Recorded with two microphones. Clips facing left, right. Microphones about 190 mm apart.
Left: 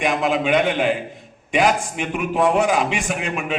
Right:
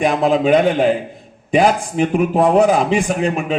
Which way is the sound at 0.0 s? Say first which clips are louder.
Right 5 dB; 35° right (ahead or behind).